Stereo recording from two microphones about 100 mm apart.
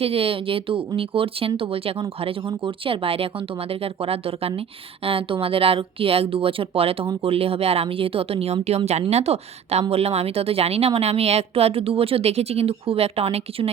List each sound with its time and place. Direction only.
0.0 s speech: 75° right (ahead or behind)
8.6 s a woman's voice: 90° right